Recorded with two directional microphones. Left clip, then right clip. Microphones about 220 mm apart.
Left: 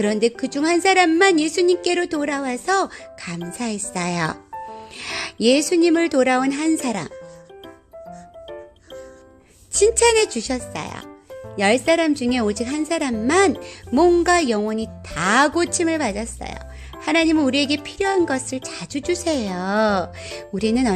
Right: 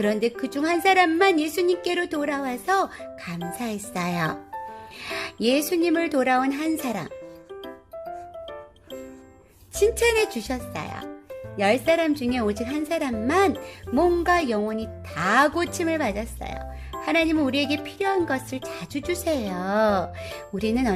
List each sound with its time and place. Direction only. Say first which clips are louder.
0.0 s a woman's voice: left 4 dB; 20° left (ahead or behind)
9.7 s a woman's voice: left 5 dB; 20° left (ahead or behind)